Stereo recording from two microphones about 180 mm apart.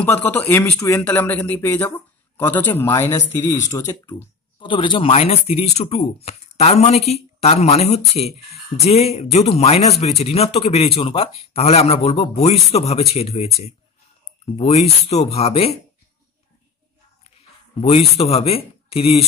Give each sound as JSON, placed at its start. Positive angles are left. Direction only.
{"t": 0.0, "sound": "speech", "side_deg": 10}
{"t": 17.7, "sound": "speech", "side_deg": 35}